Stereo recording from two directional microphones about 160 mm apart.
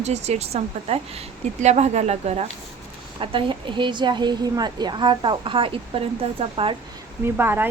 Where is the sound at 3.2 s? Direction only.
30° right (ahead or behind).